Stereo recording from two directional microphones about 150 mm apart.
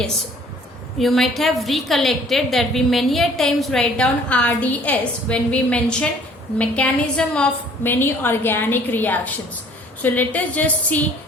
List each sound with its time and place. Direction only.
0.9 s a woman's voice: centre (ahead or behind)